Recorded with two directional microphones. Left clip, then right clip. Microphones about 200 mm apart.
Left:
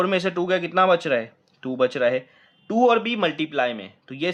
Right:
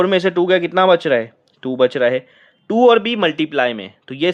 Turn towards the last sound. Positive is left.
turn(degrees=-40)  # may be behind; listen again after turning